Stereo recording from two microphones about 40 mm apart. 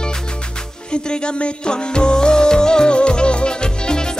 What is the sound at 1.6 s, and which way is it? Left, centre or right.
Music, left.